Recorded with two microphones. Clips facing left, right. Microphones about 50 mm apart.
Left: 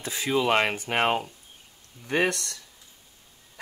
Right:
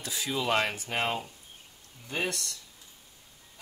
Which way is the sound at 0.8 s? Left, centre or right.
Left.